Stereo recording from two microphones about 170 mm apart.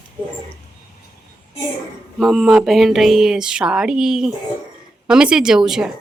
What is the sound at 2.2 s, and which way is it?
Speech, centre (ahead or behind).